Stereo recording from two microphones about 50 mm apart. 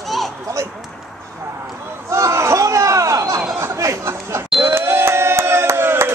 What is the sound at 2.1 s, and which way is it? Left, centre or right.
Crowd, right.